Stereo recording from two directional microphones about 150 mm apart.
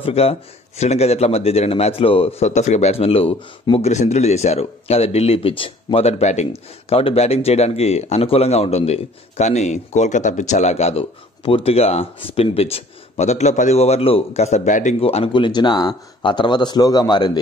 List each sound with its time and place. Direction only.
0.0 s speech: 40° left (ahead or behind)
15.0 s speech: 40° left (ahead or behind)